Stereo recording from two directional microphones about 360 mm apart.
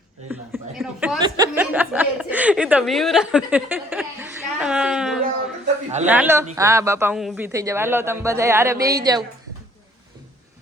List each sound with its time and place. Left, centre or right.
0.3 s chuckle: centre
6.1 s speech: centre